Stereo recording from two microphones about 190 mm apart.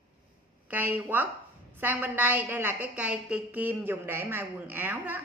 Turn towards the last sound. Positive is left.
turn(degrees=-10)  # may be behind; listen again after turning